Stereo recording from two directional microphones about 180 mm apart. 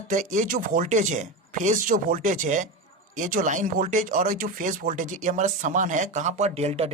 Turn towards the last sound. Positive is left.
turn(degrees=-35)  # may be behind; listen again after turning